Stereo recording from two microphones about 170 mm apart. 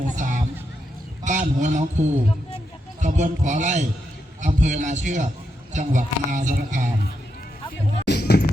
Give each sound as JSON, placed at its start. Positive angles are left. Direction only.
{"t": 0.2, "sound": "a sound", "side_deg": -50}
{"t": 1.2, "sound": "a man's voice", "side_deg": -45}
{"t": 8.0, "sound": "basketball bounce", "side_deg": 80}